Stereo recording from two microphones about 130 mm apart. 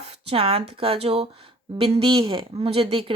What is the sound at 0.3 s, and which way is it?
A woman's voice, 45° right (ahead or behind).